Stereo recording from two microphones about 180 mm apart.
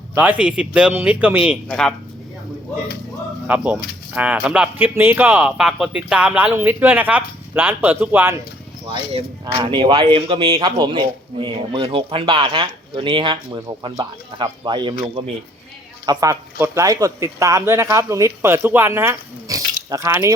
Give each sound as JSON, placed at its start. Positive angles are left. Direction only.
{"t": 0.1, "sound": "speech", "side_deg": -5}
{"t": 1.6, "sound": "speech", "side_deg": 5}
{"t": 3.4, "sound": "speech", "side_deg": -10}
{"t": 9.6, "sound": "a man's voice", "side_deg": -25}
{"t": 16.0, "sound": "speech", "side_deg": -20}